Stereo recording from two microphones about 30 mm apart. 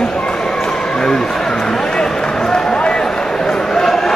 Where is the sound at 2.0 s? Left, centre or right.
Left.